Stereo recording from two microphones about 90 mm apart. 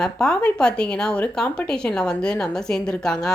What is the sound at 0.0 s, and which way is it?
A woman's voice, 5° left (ahead or behind).